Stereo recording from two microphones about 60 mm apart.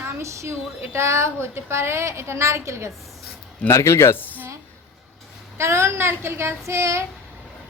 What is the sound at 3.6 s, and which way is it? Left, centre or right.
Speech, left.